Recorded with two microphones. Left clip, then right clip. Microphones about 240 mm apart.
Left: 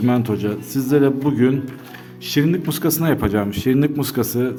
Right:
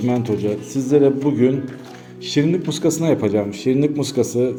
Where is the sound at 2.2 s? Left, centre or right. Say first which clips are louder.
Right 1 dB; left.